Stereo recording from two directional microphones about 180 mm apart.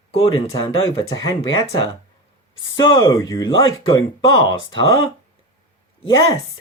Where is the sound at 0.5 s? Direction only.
25° left (ahead or behind).